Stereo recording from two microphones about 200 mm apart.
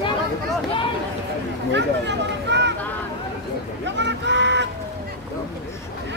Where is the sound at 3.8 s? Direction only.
60° right (ahead or behind).